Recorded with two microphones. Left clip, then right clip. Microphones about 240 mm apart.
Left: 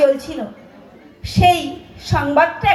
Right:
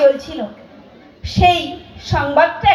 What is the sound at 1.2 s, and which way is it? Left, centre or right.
A woman's voice, left.